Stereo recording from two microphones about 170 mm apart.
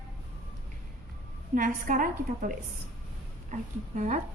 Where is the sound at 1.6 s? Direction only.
50° right (ahead or behind).